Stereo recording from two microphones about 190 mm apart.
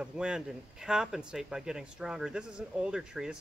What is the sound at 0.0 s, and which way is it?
Speech, 5° right (ahead or behind).